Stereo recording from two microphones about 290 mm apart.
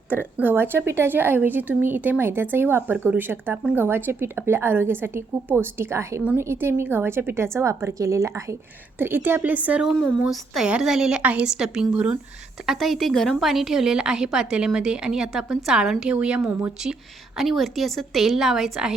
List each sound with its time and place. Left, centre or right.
0.1 s a woman's voice: centre